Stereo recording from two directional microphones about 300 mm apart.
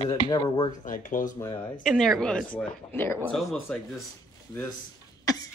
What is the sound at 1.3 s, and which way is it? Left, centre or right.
Speech, centre.